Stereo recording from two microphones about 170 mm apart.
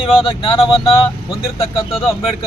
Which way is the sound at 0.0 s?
30° left (ahead or behind).